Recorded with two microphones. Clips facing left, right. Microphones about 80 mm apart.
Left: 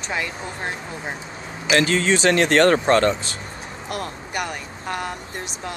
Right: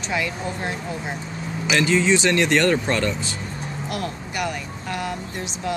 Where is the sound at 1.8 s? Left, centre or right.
Left.